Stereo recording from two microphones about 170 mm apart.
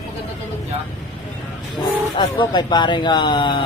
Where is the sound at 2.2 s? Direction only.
25° left (ahead or behind).